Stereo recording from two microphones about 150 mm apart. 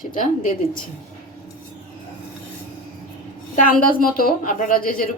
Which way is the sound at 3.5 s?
70° left (ahead or behind).